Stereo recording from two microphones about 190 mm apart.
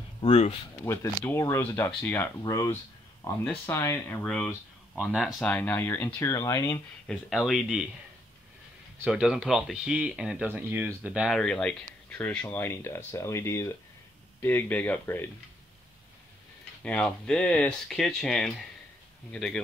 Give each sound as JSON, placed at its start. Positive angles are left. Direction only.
{"t": 0.2, "sound": "speech", "side_deg": 35}
{"t": 0.7, "sound": "speech", "side_deg": 15}
{"t": 7.1, "sound": "speech", "side_deg": 0}
{"t": 9.0, "sound": "speech", "side_deg": -5}
{"t": 16.8, "sound": "speech", "side_deg": 5}